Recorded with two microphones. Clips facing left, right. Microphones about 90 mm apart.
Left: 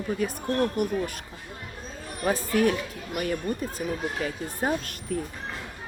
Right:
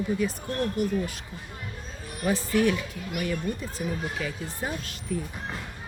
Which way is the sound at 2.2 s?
45° left (ahead or behind).